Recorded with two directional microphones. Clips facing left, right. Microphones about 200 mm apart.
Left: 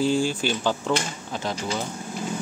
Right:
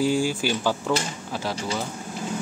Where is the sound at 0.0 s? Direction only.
10° right (ahead or behind).